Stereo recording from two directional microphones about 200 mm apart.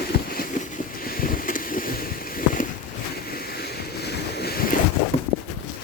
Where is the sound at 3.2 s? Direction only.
50° left (ahead or behind).